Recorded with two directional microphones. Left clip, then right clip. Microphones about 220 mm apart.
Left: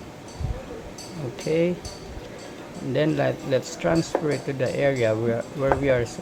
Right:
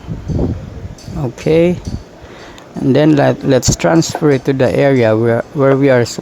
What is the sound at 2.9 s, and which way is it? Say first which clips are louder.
Speech: right 12 dB; 45° right (ahead or behind).